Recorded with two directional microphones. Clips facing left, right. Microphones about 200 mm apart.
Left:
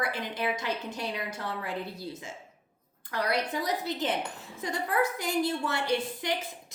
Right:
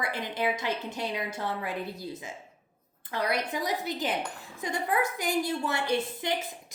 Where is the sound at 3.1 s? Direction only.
20° right (ahead or behind).